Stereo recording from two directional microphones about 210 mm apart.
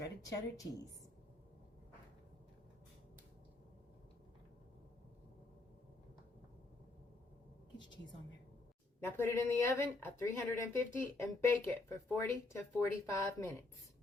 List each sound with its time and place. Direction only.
0.0 s a woman's voice: 15° left (ahead or behind)
9.0 s speech: 10° left (ahead or behind)